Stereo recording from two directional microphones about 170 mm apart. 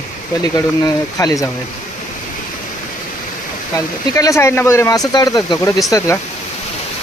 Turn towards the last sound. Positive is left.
turn(degrees=20)  # may be behind; listen again after turning